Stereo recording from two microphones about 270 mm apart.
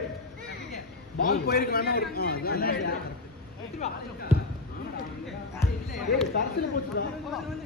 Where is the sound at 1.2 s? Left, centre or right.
Left.